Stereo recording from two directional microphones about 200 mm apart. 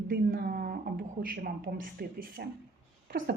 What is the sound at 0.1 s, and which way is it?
A woman's voice, 50° right (ahead or behind).